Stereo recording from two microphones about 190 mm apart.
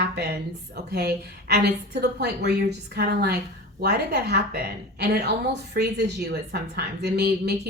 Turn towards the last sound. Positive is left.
turn(degrees=-60)  # may be behind; listen again after turning